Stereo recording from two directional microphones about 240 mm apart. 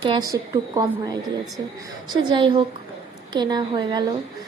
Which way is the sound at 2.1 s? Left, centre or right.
Centre.